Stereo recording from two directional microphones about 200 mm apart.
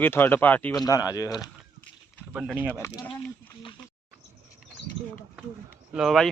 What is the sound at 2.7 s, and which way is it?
Speech, 15° left (ahead or behind).